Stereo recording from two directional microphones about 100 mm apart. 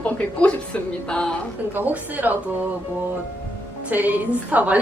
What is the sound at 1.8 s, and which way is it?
Speech, 15° right (ahead or behind).